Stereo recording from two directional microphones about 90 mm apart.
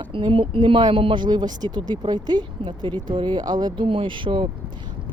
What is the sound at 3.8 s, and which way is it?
Speech, 75° right (ahead or behind).